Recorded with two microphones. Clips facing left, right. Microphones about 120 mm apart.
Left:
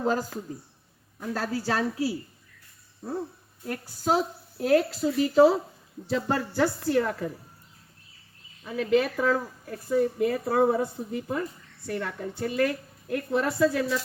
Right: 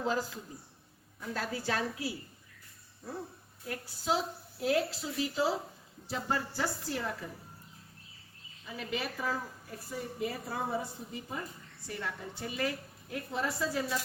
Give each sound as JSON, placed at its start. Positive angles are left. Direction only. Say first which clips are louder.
{"t": 0.0, "sound": "a woman's voice", "louder": "left 6 dB", "side_deg": 45}
{"t": 3.7, "sound": "a woman's voice", "louder": "left 7 dB", "side_deg": 45}
{"t": 8.6, "sound": "a woman's voice", "louder": "left 13 dB", "side_deg": 60}